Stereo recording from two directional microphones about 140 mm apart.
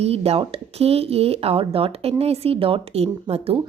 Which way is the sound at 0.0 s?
45° right (ahead or behind).